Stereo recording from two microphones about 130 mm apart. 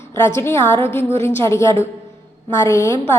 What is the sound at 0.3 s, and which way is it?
A woman's voice, 20° left (ahead or behind).